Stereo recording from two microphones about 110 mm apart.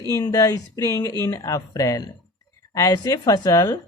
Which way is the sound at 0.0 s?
30° left (ahead or behind).